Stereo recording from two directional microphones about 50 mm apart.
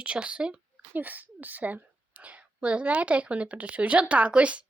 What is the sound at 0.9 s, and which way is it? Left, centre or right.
A child's voice, right.